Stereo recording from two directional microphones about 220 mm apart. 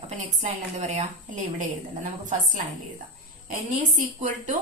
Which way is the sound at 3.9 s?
35° right (ahead or behind).